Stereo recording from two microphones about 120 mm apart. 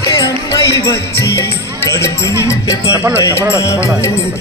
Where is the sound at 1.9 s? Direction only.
25° left (ahead or behind).